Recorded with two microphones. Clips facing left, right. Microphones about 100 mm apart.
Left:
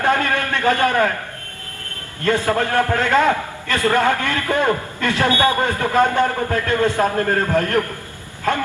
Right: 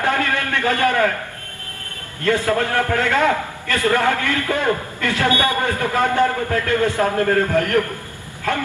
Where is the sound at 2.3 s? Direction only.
20° left (ahead or behind).